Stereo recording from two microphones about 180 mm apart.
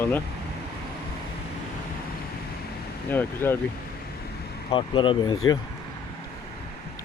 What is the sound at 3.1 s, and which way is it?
Speech, 10° left (ahead or behind).